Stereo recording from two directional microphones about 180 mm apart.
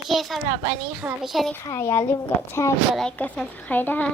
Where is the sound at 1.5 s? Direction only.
15° left (ahead or behind).